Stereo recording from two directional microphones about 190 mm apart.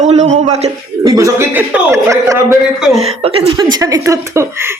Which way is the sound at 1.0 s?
20° right (ahead or behind).